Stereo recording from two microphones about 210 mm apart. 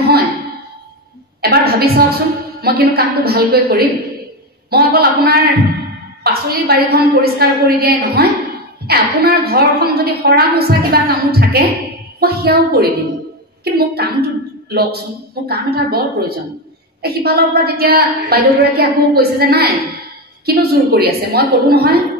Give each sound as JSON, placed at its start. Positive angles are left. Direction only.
{"t": 1.4, "sound": "a woman's voice", "side_deg": -45}